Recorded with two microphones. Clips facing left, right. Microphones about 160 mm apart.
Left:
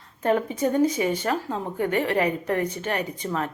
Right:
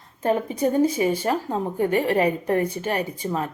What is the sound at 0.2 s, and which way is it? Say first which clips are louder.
Speech: right 1 dB; 30° right (ahead or behind).